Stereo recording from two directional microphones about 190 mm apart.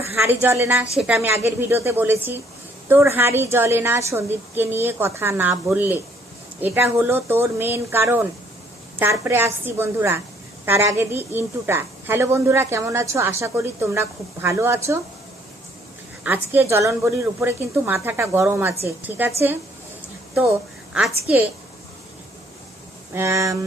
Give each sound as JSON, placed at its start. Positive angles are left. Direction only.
{"t": 0.0, "sound": "a woman's voice", "side_deg": -10}
{"t": 16.2, "sound": "a woman's voice", "side_deg": -10}
{"t": 21.3, "sound": "a woman's voice", "side_deg": -5}
{"t": 23.1, "sound": "a woman's voice", "side_deg": -15}